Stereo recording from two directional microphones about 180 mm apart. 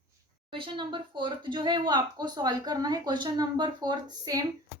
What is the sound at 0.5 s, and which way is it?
Speech, 25° right (ahead or behind).